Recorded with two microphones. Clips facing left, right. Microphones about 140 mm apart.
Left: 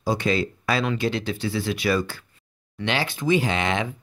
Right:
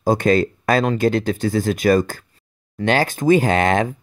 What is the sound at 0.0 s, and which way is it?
Speech, 50° right (ahead or behind).